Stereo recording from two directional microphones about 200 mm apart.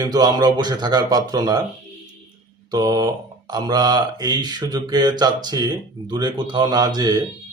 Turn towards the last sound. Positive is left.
turn(degrees=-20)  # may be behind; listen again after turning